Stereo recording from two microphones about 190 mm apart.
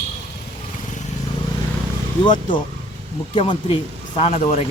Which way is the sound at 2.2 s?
25° left (ahead or behind).